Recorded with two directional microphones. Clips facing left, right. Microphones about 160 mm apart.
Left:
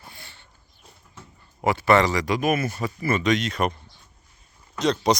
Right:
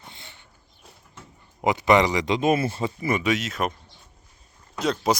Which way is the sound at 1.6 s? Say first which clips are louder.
Even; 15° right (ahead or behind).